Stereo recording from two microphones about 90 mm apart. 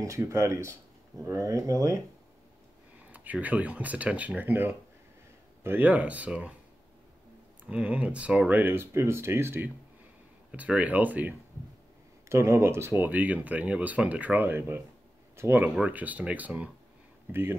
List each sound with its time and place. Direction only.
0.2 s speech: 30° right (ahead or behind)
3.1 s speech: 15° right (ahead or behind)
7.6 s speech: 15° right (ahead or behind)
8.5 s speech: 25° right (ahead or behind)
10.5 s speech: 15° right (ahead or behind)
12.3 s speech: 30° right (ahead or behind)
15.8 s speech: 15° right (ahead or behind)